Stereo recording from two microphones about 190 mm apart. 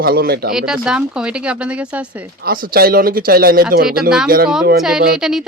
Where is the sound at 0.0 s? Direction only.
55° right (ahead or behind).